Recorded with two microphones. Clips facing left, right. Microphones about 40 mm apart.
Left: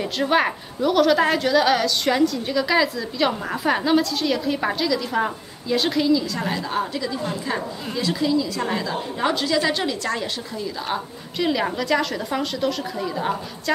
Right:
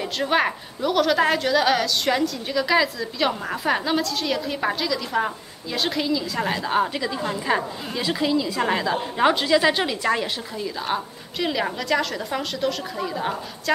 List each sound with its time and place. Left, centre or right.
0.0 s a woman's voice: centre
6.7 s a woman's voice: right; by 13.7 s centre